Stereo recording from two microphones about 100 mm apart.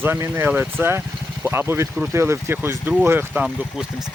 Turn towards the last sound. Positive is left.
turn(degrees=-20)  # may be behind; listen again after turning